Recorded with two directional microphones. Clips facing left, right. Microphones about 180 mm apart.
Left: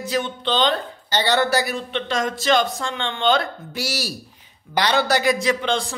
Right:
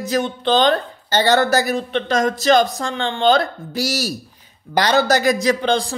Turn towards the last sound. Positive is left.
turn(degrees=-35)  # may be behind; listen again after turning